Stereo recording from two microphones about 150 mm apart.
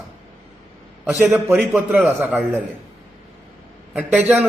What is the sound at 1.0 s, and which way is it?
A man's voice, 15° right (ahead or behind).